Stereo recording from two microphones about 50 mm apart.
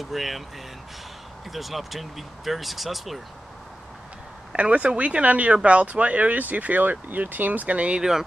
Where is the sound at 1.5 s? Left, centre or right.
Centre.